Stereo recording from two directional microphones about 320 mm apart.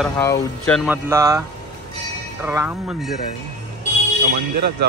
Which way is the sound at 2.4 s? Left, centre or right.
Centre.